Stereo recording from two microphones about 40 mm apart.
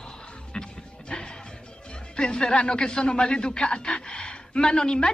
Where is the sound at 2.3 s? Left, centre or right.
Left.